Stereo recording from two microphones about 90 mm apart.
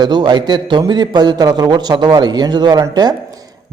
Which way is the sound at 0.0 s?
55° right (ahead or behind).